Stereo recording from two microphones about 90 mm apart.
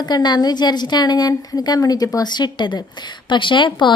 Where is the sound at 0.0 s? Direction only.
50° left (ahead or behind).